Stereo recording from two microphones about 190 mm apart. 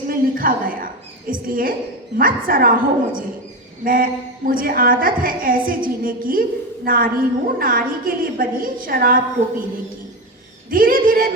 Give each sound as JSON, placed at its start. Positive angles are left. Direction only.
{"t": 0.1, "sound": "a woman's voice", "side_deg": -50}
{"t": 10.7, "sound": "a woman's voice", "side_deg": -45}